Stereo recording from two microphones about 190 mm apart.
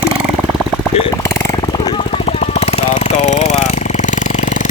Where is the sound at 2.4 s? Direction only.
35° left (ahead or behind).